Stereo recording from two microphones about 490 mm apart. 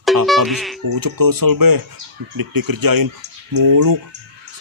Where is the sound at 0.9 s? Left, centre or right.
Right.